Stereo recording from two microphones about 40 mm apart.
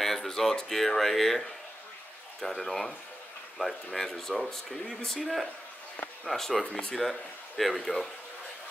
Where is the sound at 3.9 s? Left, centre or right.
Centre.